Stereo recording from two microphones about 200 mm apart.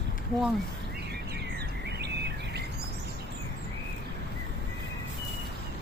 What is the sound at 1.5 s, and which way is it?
Bird vocalization, 55° right (ahead or behind).